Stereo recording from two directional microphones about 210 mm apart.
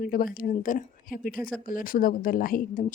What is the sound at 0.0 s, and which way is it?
A woman's voice, 45° left (ahead or behind).